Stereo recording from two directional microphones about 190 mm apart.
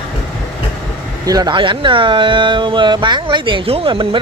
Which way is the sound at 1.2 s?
20° right (ahead or behind).